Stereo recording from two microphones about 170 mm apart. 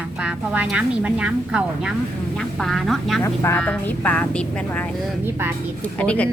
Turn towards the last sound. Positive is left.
turn(degrees=5)  # may be behind; listen again after turning